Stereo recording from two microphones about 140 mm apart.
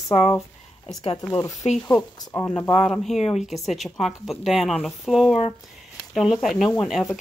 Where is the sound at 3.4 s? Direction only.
Centre (ahead or behind).